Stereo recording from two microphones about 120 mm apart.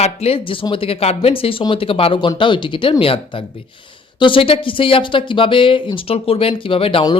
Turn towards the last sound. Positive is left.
turn(degrees=50)  # may be behind; listen again after turning